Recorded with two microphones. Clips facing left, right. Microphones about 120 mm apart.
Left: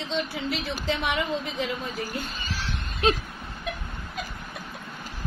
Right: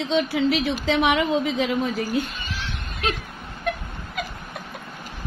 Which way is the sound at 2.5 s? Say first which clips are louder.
Right 1 dB; 30° left (ahead or behind).